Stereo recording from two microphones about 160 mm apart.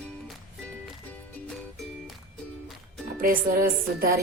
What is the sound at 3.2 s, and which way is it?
Speech, 60° right (ahead or behind).